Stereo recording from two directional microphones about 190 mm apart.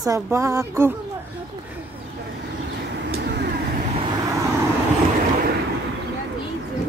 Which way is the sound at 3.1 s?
60° right (ahead or behind).